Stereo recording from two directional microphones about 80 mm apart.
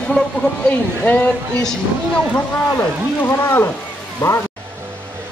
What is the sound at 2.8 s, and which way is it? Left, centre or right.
Speech, left.